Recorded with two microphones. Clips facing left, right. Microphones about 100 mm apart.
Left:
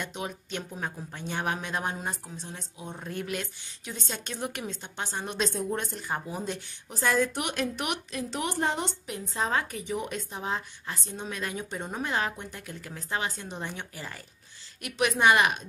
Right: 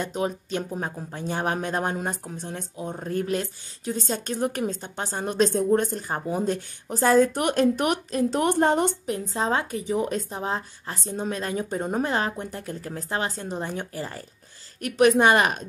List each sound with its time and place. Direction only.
0.0 s a woman's voice: 35° right (ahead or behind)